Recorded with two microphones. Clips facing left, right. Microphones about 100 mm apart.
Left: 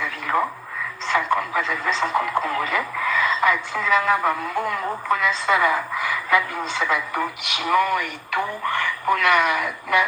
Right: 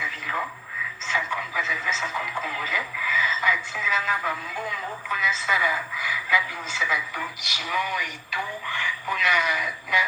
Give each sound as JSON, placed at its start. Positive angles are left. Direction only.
{"t": 0.0, "sound": "radio", "side_deg": 60}
{"t": 1.0, "sound": "speech", "side_deg": 55}